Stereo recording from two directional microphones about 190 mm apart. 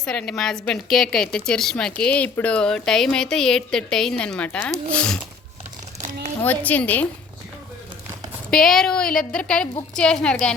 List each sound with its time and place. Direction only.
0.0 s speech: 5° left (ahead or behind)
6.0 s a sound: 45° right (ahead or behind)
6.4 s speech: 10° left (ahead or behind)
8.4 s speech: centre (ahead or behind)